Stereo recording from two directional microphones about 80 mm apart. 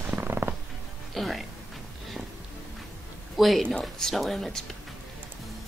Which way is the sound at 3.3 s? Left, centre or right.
Centre.